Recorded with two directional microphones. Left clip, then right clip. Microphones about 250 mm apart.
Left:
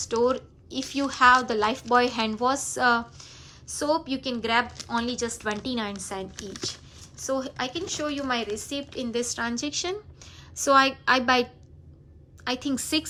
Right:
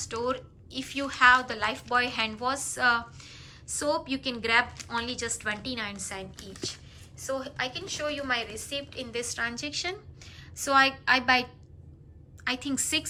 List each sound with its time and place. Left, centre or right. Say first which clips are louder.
0.0 s a woman's voice: left 7 dB; centre
12.5 s a woman's voice: left 2 dB; centre